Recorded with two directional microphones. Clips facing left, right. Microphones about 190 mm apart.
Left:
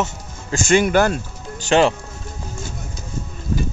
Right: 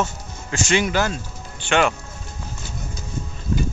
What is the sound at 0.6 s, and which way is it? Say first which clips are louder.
Speech: left 5 dB; 50° left (ahead or behind).